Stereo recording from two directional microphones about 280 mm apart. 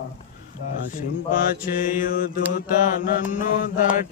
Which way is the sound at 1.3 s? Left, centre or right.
Left.